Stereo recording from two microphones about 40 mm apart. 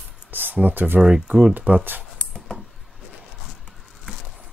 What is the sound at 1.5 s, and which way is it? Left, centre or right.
Speech, right.